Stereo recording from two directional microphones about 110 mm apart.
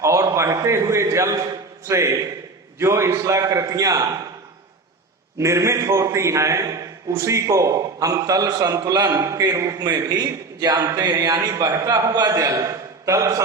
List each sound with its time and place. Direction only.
0.0 s a man's voice: 25° right (ahead or behind)
5.4 s a man's voice: 25° right (ahead or behind)